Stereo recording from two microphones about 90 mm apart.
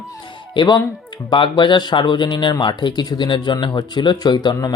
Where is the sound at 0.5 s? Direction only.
55° left (ahead or behind).